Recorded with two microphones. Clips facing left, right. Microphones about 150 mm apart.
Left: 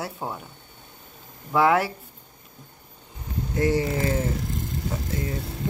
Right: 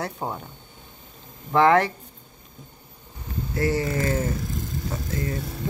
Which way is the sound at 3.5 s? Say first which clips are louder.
Left 1 dB; 15° left (ahead or behind).